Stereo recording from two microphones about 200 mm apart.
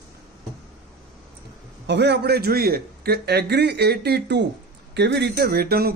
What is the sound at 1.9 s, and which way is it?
A man's voice, 60° right (ahead or behind).